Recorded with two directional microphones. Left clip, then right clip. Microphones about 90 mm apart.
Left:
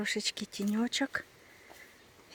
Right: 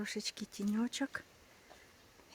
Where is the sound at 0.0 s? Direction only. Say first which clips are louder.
Left 8 dB; 15° left (ahead or behind).